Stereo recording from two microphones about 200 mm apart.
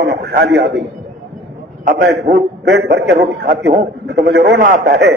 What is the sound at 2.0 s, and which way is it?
A man's voice, 60° right (ahead or behind).